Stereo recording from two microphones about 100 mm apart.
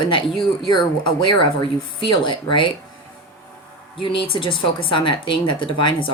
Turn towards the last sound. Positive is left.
turn(degrees=55)  # may be behind; listen again after turning